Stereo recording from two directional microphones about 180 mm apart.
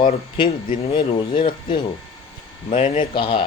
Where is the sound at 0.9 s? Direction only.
25° left (ahead or behind).